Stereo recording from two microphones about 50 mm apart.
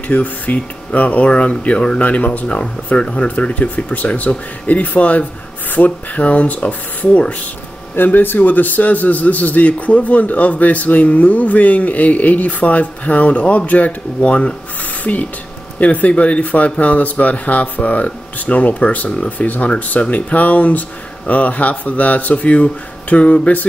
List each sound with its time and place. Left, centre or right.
0.1 s a man's voice: left
7.9 s a man's voice: left